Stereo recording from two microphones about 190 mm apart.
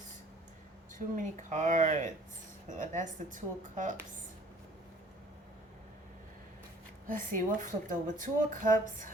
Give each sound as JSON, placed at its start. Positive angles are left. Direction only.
{"t": 0.9, "sound": "speech", "side_deg": -45}
{"t": 7.1, "sound": "speech", "side_deg": -45}